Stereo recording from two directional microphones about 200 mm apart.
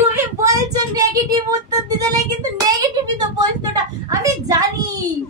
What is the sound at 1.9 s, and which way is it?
Music, 20° right (ahead or behind).